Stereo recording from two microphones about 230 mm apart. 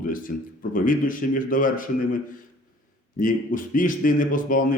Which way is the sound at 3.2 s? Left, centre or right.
Left.